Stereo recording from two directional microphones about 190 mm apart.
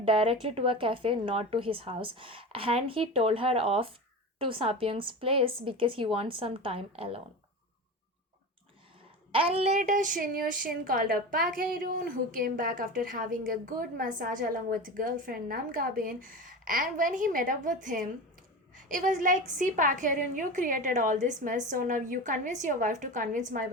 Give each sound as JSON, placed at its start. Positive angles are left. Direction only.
{"t": 0.0, "sound": "speech", "side_deg": -30}
{"t": 9.3, "sound": "a woman's voice", "side_deg": -30}